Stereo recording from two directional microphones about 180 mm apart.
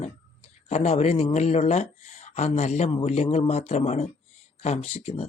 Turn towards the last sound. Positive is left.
turn(degrees=35)  # may be behind; listen again after turning